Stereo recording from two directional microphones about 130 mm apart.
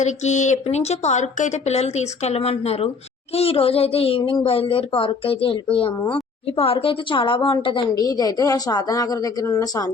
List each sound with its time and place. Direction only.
0.0 s a woman's voice: 65° left (ahead or behind); by 9.9 s 25° left (ahead or behind)